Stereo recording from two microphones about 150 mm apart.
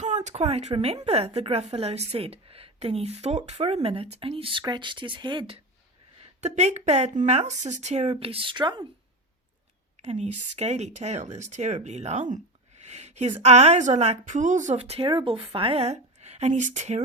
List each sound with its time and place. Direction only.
0.0 s a woman's voice: 50° right (ahead or behind); by 5.5 s 30° right (ahead or behind)
6.4 s a woman's voice: 50° right (ahead or behind)
8.1 s speech: 40° right (ahead or behind)
10.0 s a woman's voice: 45° right (ahead or behind)